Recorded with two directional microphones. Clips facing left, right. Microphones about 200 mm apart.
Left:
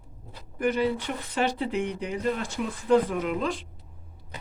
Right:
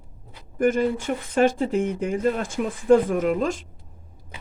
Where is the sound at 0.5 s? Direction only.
45° right (ahead or behind).